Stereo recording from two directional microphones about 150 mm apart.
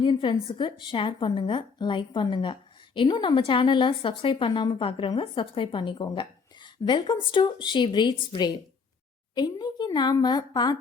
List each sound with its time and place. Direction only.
0.0 s a woman's voice: 35° left (ahead or behind)